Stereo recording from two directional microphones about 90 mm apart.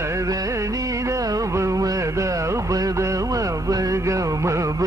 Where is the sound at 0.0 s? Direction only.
35° right (ahead or behind).